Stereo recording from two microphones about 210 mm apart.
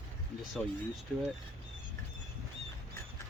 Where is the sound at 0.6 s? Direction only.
5° left (ahead or behind).